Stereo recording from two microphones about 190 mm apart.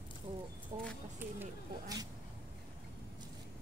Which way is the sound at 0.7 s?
25° right (ahead or behind).